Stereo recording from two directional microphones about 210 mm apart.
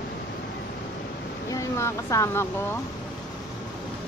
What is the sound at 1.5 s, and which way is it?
Speech, 15° left (ahead or behind).